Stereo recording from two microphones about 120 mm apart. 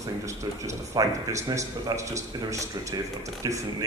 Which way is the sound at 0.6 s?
25° right (ahead or behind).